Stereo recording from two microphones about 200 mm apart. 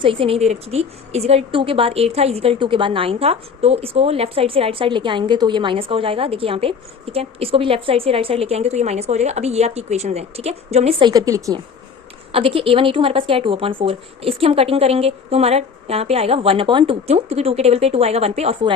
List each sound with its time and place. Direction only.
0.0 s a woman's voice: 25° right (ahead or behind)
11.1 s a woman's voice: 20° right (ahead or behind)
12.3 s a woman's voice: 25° right (ahead or behind)